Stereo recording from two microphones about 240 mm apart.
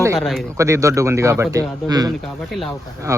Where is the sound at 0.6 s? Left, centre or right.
Centre.